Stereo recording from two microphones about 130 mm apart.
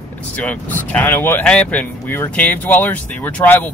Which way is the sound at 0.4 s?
15° left (ahead or behind).